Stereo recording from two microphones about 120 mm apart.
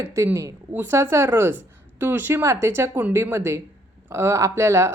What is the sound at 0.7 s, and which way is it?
A woman's voice, 20° right (ahead or behind).